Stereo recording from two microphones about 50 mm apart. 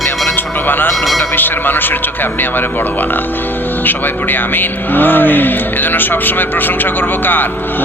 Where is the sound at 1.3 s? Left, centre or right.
Left.